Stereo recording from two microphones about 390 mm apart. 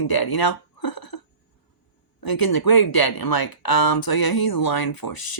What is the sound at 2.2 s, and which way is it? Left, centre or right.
Speech, left.